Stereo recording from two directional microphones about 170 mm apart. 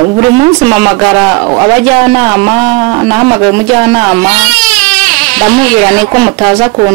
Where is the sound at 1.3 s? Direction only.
25° right (ahead or behind).